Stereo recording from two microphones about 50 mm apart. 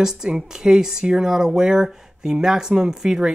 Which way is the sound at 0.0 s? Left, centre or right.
Centre.